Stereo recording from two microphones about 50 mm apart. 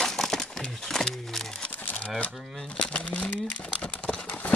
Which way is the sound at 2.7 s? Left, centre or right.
Left.